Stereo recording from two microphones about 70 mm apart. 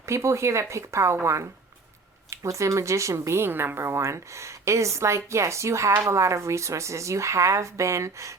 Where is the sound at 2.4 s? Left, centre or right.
Right.